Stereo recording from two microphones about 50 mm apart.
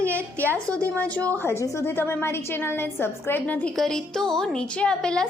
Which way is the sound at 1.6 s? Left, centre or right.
Left.